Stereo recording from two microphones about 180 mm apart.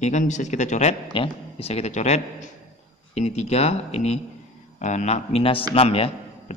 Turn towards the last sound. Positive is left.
turn(degrees=35)  # may be behind; listen again after turning